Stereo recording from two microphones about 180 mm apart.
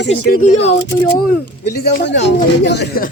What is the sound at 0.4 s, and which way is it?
Speech, 40° left (ahead or behind).